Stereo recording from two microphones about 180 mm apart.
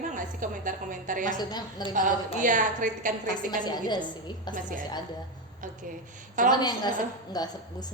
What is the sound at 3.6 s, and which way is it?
A woman's voice, 25° left (ahead or behind).